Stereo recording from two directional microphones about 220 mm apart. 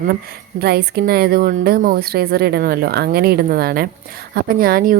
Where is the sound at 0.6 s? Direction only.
45° right (ahead or behind).